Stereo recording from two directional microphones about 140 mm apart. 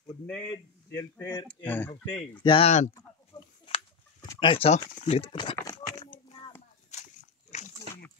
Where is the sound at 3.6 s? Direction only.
40° left (ahead or behind).